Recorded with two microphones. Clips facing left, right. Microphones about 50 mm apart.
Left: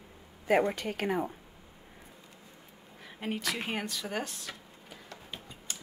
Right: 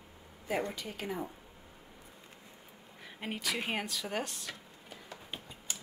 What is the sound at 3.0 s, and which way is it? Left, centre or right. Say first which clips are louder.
Speech: left 3 dB; centre.